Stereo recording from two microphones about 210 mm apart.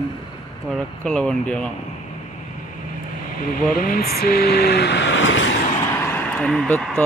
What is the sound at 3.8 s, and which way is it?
Speech, 45° left (ahead or behind).